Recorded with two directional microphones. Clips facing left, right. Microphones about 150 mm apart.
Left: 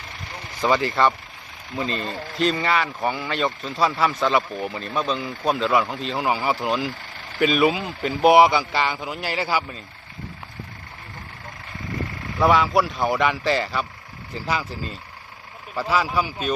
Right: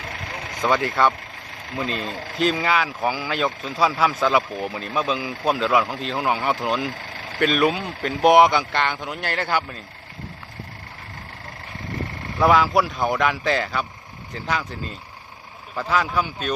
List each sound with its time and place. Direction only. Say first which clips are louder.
0.0 s vehicle: right 4 dB; 60° right (ahead or behind)
0.6 s speech: even; centre (ahead or behind)
12.4 s speech: right 1 dB; centre (ahead or behind)